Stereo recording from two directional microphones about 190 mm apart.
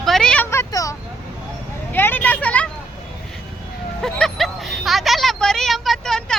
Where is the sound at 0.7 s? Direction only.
15° left (ahead or behind).